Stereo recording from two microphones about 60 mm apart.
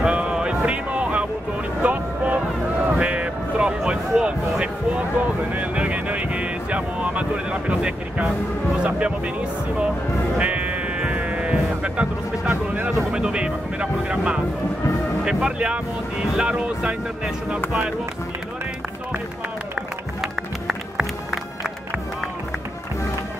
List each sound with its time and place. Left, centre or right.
0.0 s music: centre
1.8 s a sound: right
5.5 s speech: right
10.3 s sheep: centre
15.2 s speech: centre
20.2 s music: centre